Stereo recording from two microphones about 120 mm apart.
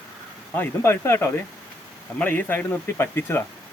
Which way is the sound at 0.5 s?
20° left (ahead or behind).